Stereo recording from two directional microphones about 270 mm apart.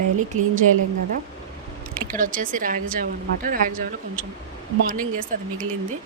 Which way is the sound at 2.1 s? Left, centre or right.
Right.